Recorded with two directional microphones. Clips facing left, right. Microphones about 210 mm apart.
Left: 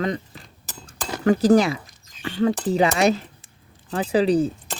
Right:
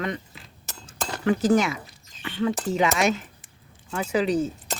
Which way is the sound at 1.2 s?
40° left (ahead or behind).